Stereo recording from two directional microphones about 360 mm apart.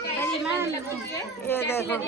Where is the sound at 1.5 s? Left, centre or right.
Centre.